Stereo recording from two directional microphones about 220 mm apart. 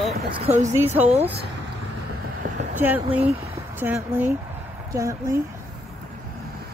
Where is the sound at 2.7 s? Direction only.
10° right (ahead or behind).